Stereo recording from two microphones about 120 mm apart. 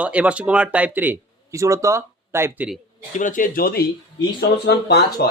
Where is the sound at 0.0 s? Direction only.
10° right (ahead or behind).